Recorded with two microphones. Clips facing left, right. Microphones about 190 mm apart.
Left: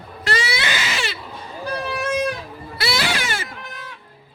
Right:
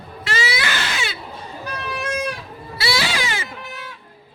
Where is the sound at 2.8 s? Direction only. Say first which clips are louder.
Even; 55° left (ahead or behind).